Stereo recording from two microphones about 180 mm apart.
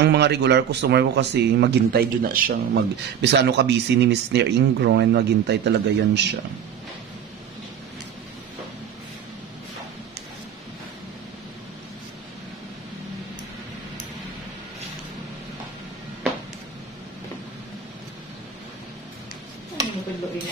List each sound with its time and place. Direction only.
0.0 s speech: 70° right (ahead or behind); by 2.6 s 50° right (ahead or behind)
2.7 s speech: 70° right (ahead or behind)